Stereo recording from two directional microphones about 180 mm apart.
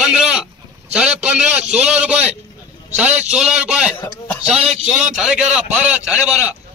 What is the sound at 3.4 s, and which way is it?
Speech, 5° right (ahead or behind).